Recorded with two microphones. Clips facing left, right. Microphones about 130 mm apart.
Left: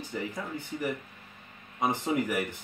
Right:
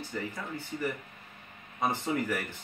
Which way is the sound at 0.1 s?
10° left (ahead or behind).